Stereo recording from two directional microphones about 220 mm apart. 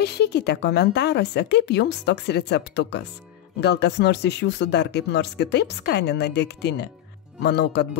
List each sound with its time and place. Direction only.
0.0 s speech: 50° left (ahead or behind)